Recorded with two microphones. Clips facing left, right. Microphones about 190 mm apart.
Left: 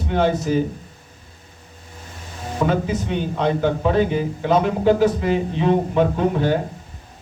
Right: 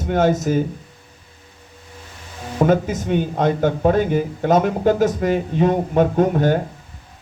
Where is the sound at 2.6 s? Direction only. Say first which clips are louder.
Right 4 dB; 45° right (ahead or behind).